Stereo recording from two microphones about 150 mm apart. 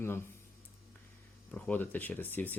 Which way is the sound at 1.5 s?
10° left (ahead or behind).